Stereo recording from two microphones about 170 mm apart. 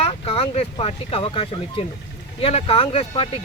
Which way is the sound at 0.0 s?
35° left (ahead or behind).